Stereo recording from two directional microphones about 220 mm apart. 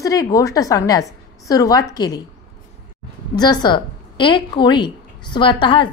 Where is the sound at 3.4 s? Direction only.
20° left (ahead or behind).